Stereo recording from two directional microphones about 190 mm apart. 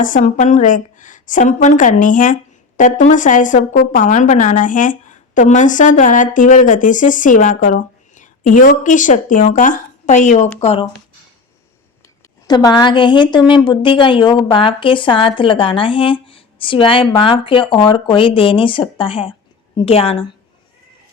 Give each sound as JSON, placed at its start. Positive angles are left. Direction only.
{"t": 0.0, "sound": "a woman's voice", "side_deg": 45}
{"t": 12.5, "sound": "a woman's voice", "side_deg": 20}